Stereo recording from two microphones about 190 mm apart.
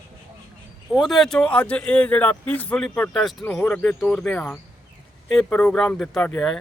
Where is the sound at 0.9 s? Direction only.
Centre (ahead or behind).